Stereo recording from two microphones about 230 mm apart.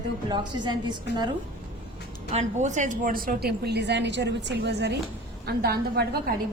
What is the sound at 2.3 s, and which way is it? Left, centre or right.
A woman's voice, right.